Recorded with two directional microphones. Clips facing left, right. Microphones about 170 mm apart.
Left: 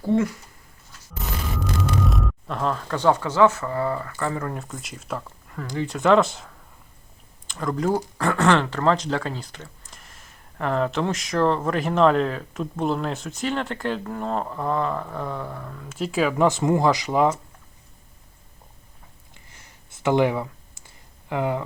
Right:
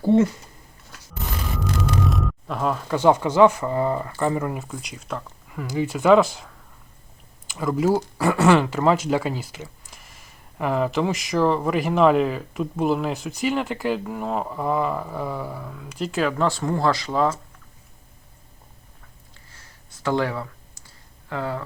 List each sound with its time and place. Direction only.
0.0 s speech: 25° right (ahead or behind)
2.0 s speech: centre (ahead or behind)
4.6 s speech: centre (ahead or behind)
16.5 s speech: 20° left (ahead or behind)
19.3 s clicking: 20° left (ahead or behind)